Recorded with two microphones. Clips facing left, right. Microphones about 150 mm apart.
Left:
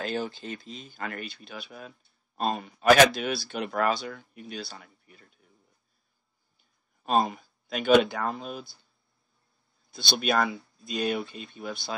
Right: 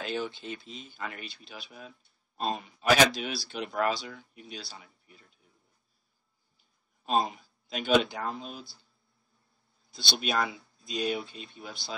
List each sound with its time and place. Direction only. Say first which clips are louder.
0.0 s speech: left 2 dB; 40° left (ahead or behind)
7.0 s speech: left 3 dB; 50° left (ahead or behind)
9.9 s speech: left 4 dB; 55° left (ahead or behind)
11.2 s speech: left 3 dB; centre (ahead or behind)
11.6 s speech: left 10 dB; 55° left (ahead or behind)